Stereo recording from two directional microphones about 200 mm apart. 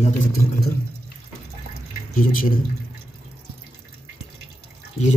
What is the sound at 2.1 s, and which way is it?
Speech, 45° left (ahead or behind).